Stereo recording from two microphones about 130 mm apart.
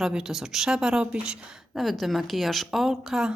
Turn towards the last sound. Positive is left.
turn(degrees=-5)  # may be behind; listen again after turning